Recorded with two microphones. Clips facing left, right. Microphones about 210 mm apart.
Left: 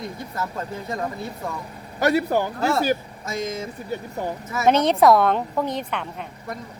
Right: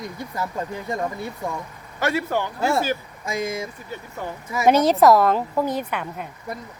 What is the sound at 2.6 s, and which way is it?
A woman's voice, 15° right (ahead or behind).